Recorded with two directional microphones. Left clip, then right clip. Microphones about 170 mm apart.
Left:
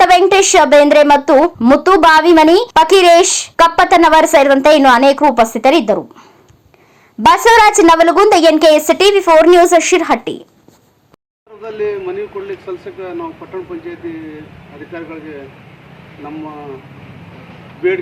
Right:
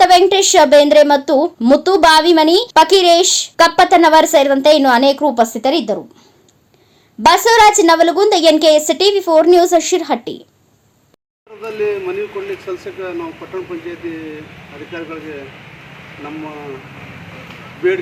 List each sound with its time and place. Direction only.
0.0 s a woman's voice: 5° left (ahead or behind)
7.3 s a woman's voice: 10° left (ahead or behind)
11.8 s a man's voice: 30° left (ahead or behind)